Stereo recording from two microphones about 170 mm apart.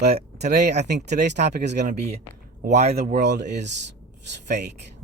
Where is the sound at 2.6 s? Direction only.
40° right (ahead or behind).